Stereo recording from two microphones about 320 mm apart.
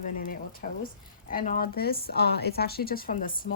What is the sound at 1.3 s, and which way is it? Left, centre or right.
A woman's voice, left.